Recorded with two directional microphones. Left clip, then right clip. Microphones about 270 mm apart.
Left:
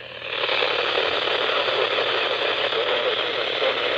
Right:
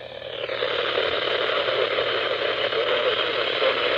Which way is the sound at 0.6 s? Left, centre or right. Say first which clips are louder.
Right 2 dB; centre.